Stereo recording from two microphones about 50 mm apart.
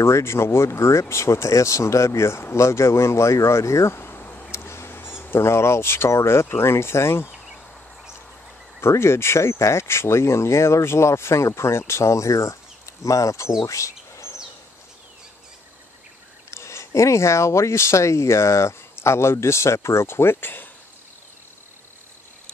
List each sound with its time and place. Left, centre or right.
0.0 s speech: left
3.9 s a sound: left
4.6 s a sound: left
5.3 s speech: left
8.8 s speech: left
16.4 s speech: left